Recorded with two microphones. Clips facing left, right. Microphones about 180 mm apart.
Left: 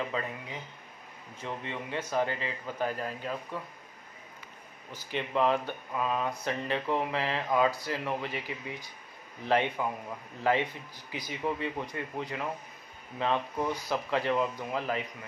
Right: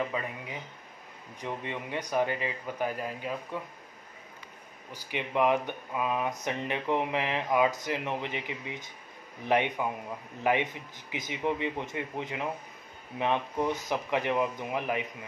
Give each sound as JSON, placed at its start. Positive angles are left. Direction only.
{"t": 0.1, "sound": "a man's voice", "side_deg": -15}
{"t": 1.4, "sound": "a man's voice", "side_deg": -15}
{"t": 4.9, "sound": "a man's voice", "side_deg": -15}